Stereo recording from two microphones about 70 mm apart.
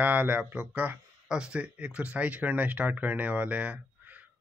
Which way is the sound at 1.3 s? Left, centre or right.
Centre.